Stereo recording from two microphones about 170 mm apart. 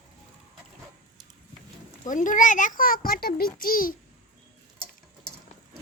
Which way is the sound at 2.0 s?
50° left (ahead or behind).